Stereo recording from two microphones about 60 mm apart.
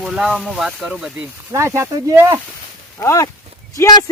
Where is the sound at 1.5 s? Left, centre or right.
Right.